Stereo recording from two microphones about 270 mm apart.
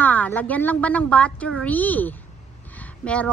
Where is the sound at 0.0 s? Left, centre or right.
Centre.